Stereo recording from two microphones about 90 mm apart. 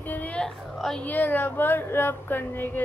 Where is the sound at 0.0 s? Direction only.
20° left (ahead or behind).